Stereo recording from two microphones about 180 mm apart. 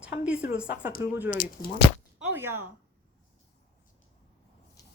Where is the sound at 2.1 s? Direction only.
10° right (ahead or behind).